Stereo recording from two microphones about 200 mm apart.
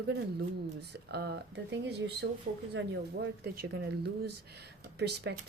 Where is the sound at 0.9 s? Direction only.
55° right (ahead or behind).